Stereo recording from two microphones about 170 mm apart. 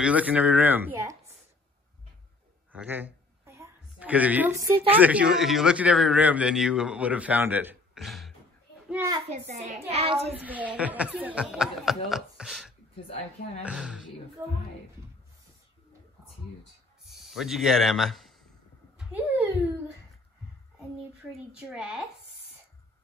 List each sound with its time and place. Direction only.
0.0 s speech: 10° right (ahead or behind)
2.7 s a woman's voice: 10° right (ahead or behind)
8.9 s speech: 20° right (ahead or behind)
9.3 s a child's voice: 40° right (ahead or behind)
10.4 s speech: 10° right (ahead or behind)
17.0 s speech: centre (ahead or behind)
18.9 s a sound: 10° right (ahead or behind)
21.5 s speech: 5° right (ahead or behind)